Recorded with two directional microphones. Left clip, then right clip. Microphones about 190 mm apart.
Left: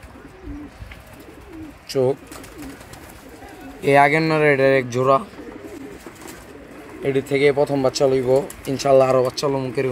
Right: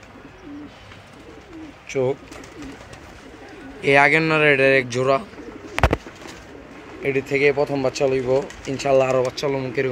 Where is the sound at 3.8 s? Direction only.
40° left (ahead or behind).